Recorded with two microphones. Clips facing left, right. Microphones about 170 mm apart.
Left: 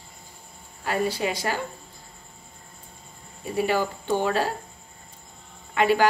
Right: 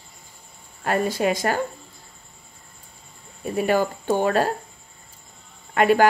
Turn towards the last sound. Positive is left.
turn(degrees=-50)  # may be behind; listen again after turning